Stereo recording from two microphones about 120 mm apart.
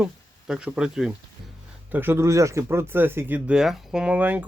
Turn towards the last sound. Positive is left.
turn(degrees=-15)  # may be behind; listen again after turning